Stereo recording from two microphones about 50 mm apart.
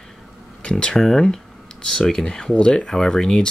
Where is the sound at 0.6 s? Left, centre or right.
Centre.